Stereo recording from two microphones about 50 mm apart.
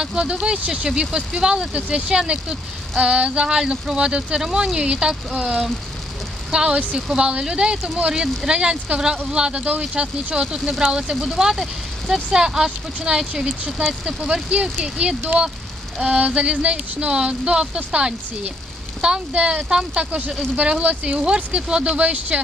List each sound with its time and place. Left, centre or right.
0.0 s speech: centre